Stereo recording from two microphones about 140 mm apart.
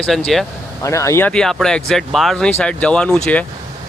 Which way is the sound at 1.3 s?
5° left (ahead or behind).